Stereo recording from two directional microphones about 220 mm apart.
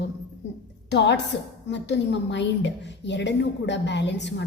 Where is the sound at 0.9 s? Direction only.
50° left (ahead or behind).